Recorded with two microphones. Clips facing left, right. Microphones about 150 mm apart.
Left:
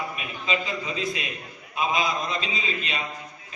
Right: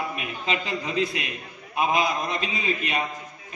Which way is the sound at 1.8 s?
55° right (ahead or behind).